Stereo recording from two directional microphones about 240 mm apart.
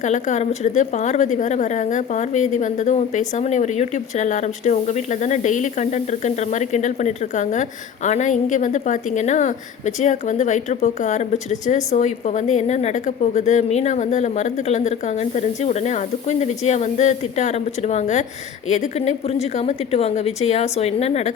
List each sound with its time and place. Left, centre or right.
0.0 s a woman's voice: left